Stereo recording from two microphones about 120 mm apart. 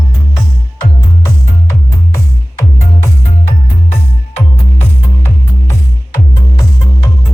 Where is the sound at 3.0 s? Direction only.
20° left (ahead or behind).